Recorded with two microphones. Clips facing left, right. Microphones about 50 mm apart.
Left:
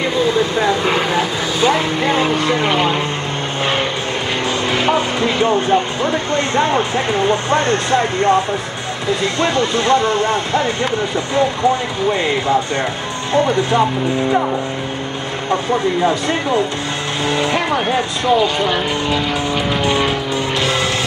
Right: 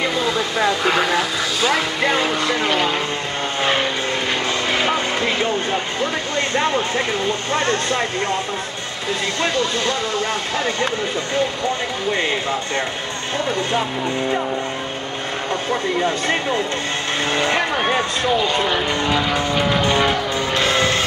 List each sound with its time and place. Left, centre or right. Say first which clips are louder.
0.8 s vehicle: left 1 dB; left
4.7 s music: left 5 dB; left
6.5 s speech: left 3 dB; left
17.3 s speech: left 2 dB; right
18.7 s speech: left 1 dB; centre
20.5 s vehicle: right 2 dB; right